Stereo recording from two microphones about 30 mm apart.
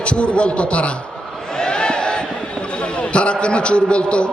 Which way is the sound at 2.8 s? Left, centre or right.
Left.